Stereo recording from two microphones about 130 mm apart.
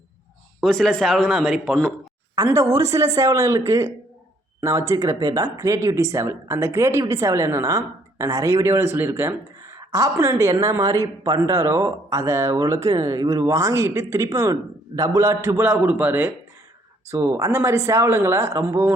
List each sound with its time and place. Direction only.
0.6 s speech: 5° left (ahead or behind)
2.3 s speech: 25° right (ahead or behind)